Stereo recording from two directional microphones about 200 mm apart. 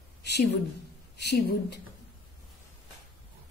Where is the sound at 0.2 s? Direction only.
55° left (ahead or behind).